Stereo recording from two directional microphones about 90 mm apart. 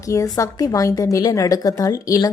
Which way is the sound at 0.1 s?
35° left (ahead or behind).